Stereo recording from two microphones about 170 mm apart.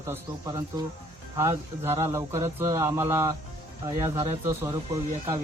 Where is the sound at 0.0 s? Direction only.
15° right (ahead or behind).